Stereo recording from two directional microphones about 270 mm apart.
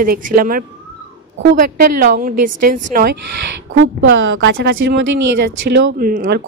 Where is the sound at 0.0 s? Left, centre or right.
Right.